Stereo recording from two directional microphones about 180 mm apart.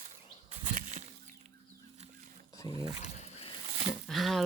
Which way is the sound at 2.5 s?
20° left (ahead or behind).